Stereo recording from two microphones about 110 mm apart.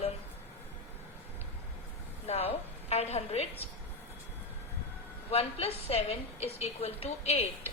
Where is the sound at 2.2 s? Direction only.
75° left (ahead or behind).